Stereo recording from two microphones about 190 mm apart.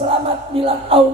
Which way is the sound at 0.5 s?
30° right (ahead or behind).